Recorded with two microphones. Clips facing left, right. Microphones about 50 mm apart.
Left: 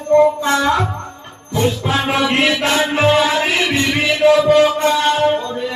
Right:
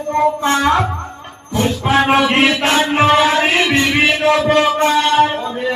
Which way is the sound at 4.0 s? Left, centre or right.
Right.